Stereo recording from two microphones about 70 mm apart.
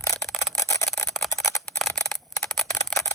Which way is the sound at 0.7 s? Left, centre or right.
Left.